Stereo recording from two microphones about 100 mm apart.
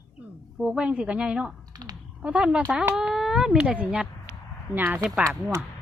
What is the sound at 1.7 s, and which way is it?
Typing, 45° right (ahead or behind).